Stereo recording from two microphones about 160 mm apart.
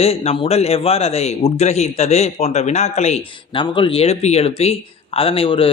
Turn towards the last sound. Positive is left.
turn(degrees=35)  # may be behind; listen again after turning